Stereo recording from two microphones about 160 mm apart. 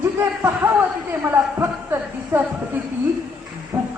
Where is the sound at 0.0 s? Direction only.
15° right (ahead or behind).